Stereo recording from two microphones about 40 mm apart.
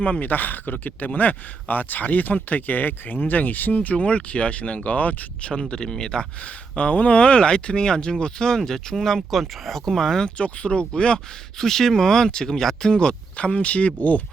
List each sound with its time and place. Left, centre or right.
0.2 s speech: left
5.6 s speech: left
6.4 s speech: left; by 10.2 s centre
10.2 s speech: left
11.5 s speech: centre
12.9 s speech: left